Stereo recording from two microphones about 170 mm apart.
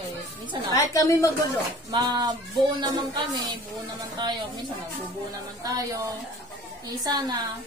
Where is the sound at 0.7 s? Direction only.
20° left (ahead or behind).